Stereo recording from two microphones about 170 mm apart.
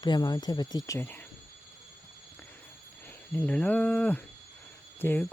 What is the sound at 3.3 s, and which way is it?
Speech, 5° left (ahead or behind).